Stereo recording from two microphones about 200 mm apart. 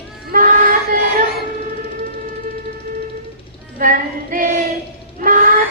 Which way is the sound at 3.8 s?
40° right (ahead or behind).